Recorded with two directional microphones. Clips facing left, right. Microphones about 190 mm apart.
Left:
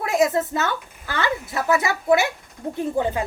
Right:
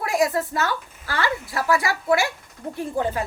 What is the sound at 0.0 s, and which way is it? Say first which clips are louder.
A woman's voice: left 2 dB; 20° left (ahead or behind).